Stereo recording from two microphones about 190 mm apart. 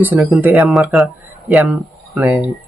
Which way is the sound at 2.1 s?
10° right (ahead or behind).